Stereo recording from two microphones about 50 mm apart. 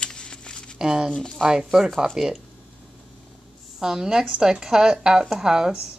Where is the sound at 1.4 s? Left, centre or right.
Centre.